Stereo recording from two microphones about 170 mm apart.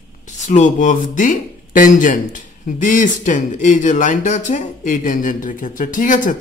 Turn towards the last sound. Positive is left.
turn(degrees=50)  # may be behind; listen again after turning